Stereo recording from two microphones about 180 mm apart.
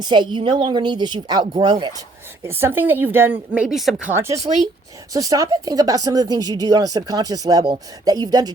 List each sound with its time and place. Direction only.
0.0 s a woman's voice: 25° right (ahead or behind); by 4.1 s centre (ahead or behind)
4.1 s a woman's voice: 15° right (ahead or behind)